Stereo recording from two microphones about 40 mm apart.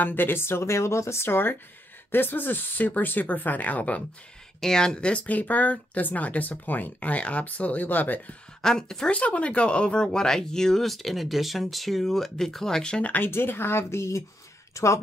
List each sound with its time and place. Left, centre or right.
0.0 s speech: left
2.0 s speech: left
4.6 s speech: centre; by 8.4 s left
8.6 s speech: centre
9.1 s speech: left
10.0 s speech: centre
13.2 s speech: left